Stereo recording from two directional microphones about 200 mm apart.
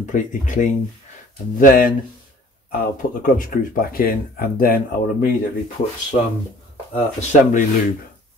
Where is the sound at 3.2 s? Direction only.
45° left (ahead or behind).